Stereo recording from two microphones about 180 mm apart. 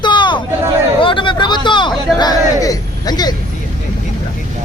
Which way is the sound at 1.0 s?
25° left (ahead or behind).